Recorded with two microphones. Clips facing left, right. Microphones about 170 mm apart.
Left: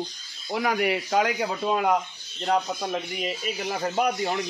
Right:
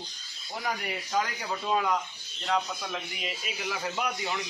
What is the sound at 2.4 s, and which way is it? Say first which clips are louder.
Speech: left 5 dB; 40° left (ahead or behind).